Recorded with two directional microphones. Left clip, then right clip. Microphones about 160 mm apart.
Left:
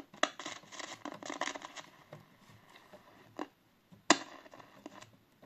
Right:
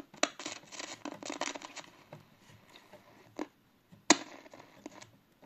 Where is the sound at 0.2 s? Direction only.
20° right (ahead or behind).